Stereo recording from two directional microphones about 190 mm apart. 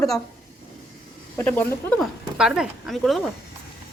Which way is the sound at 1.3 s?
10° left (ahead or behind).